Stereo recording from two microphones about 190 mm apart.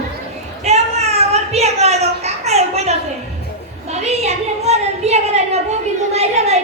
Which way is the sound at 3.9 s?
35° right (ahead or behind).